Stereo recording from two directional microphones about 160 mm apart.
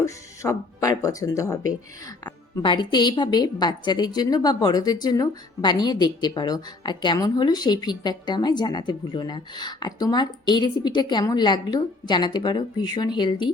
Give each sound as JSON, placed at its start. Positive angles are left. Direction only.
{"t": 0.0, "sound": "a woman's voice", "side_deg": 20}